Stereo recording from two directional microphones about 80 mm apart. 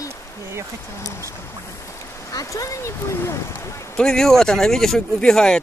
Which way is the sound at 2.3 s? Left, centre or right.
Left.